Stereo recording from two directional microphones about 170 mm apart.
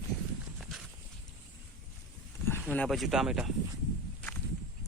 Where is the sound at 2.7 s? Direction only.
5° left (ahead or behind).